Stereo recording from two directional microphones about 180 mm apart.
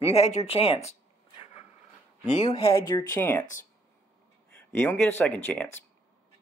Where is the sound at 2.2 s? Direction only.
40° left (ahead or behind).